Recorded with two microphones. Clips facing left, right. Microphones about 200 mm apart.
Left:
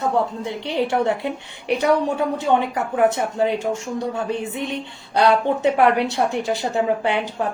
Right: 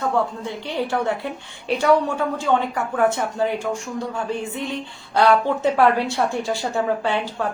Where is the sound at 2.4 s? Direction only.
20° left (ahead or behind).